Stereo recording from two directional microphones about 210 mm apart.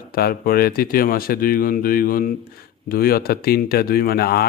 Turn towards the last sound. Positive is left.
turn(degrees=45)  # may be behind; listen again after turning